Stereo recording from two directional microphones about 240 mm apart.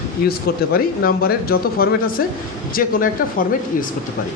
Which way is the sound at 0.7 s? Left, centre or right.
Left.